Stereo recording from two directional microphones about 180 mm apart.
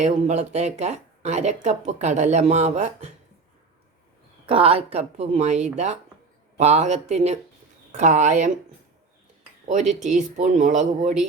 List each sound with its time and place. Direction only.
0.0 s speech: 40° right (ahead or behind)
4.4 s speech: 30° right (ahead or behind)
10.0 s speech: 40° right (ahead or behind)